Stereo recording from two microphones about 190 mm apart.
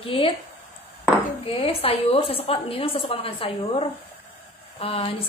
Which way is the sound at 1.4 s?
30° left (ahead or behind).